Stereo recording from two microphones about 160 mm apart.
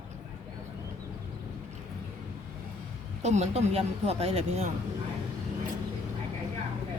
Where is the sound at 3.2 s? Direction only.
45° right (ahead or behind).